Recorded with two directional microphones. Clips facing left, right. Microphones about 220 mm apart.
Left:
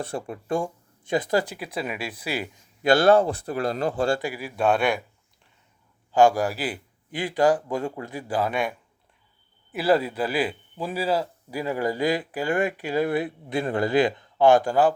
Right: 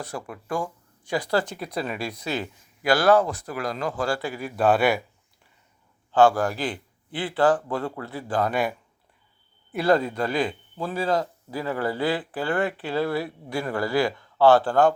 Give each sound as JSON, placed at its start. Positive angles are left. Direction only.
{"t": 0.0, "sound": "speech", "side_deg": 30}
{"t": 2.8, "sound": "speech", "side_deg": 25}
{"t": 4.2, "sound": "speech", "side_deg": 10}
{"t": 4.4, "sound": "speech", "side_deg": 0}
{"t": 6.1, "sound": "speech", "side_deg": 10}
{"t": 9.7, "sound": "speech", "side_deg": 5}